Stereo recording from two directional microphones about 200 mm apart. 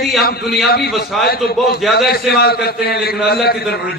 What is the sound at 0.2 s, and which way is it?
Speech, 50° left (ahead or behind).